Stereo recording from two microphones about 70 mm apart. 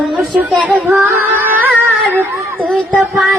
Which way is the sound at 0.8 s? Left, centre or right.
Right.